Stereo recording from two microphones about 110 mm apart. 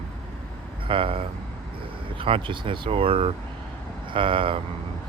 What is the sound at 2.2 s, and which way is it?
Speech, 55° right (ahead or behind).